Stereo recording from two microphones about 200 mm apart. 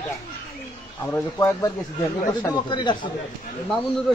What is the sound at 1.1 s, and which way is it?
Speech, 15° left (ahead or behind).